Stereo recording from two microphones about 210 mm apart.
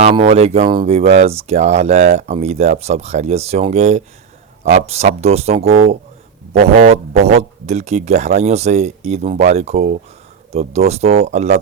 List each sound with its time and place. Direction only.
0.0 s speech: 30° right (ahead or behind)